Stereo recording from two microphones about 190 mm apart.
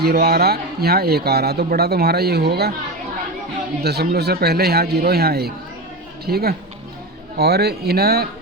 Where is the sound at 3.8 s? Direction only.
55° right (ahead or behind).